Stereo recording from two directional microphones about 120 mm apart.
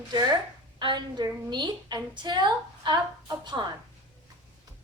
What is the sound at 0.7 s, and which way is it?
A woman's voice, 40° right (ahead or behind).